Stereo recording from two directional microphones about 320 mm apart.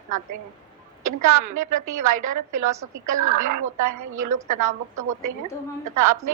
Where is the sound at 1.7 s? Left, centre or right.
Right.